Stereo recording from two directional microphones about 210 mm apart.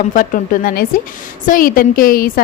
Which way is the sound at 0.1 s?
40° left (ahead or behind).